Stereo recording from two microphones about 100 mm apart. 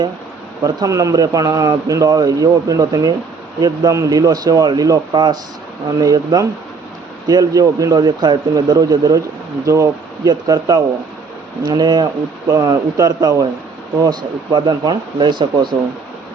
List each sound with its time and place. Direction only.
0.6 s a man's voice: 35° right (ahead or behind); by 15.7 s 50° right (ahead or behind)